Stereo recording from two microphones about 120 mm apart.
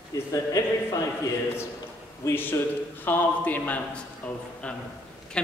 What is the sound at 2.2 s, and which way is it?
A man's voice, 20° left (ahead or behind).